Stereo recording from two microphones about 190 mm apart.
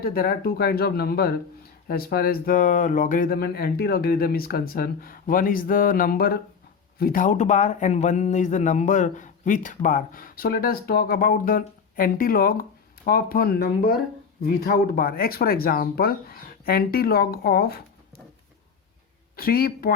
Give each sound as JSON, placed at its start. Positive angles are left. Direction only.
{"t": 0.0, "sound": "speech", "side_deg": 50}
{"t": 19.4, "sound": "speech", "side_deg": 50}